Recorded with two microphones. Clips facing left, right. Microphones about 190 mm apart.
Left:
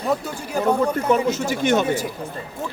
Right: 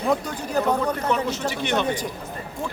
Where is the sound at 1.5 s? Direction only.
45° left (ahead or behind).